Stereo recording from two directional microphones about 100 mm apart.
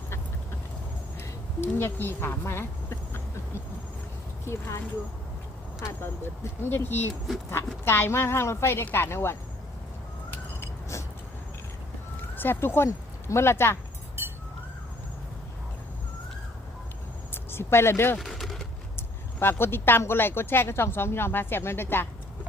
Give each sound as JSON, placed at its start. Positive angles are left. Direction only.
{"t": 1.6, "sound": "speech", "side_deg": 20}
{"t": 5.8, "sound": "speech", "side_deg": 25}
{"t": 10.6, "sound": "a sound", "side_deg": 30}
{"t": 12.4, "sound": "speech", "side_deg": 20}
{"t": 17.3, "sound": "speech", "side_deg": 25}
{"t": 18.2, "sound": "a sound", "side_deg": 0}
{"t": 18.9, "sound": "speech", "side_deg": 25}